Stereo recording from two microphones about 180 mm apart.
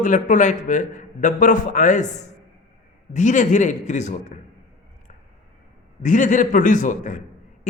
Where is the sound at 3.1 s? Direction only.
45° left (ahead or behind).